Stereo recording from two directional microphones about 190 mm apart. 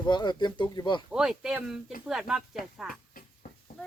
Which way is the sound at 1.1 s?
5° right (ahead or behind).